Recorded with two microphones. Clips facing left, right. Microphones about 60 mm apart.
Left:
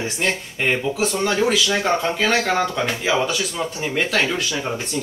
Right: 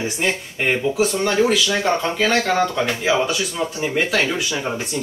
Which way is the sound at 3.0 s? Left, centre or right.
Centre.